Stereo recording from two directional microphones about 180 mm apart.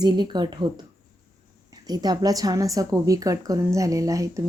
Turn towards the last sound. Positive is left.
turn(degrees=-20)  # may be behind; listen again after turning